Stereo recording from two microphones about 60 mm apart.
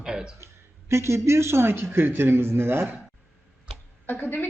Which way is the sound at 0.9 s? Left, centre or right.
Right.